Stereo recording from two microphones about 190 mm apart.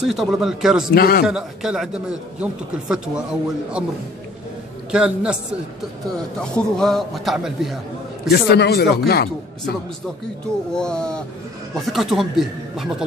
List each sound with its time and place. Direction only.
0.0 s a man's voice: centre (ahead or behind)
0.9 s speech: 55° left (ahead or behind)
1.2 s a man's voice: 5° right (ahead or behind)
4.9 s a man's voice: 5° right (ahead or behind)
6.4 s a man's voice: 5° left (ahead or behind)
8.3 s speech: 60° left (ahead or behind)
10.7 s a man's voice: 5° left (ahead or behind)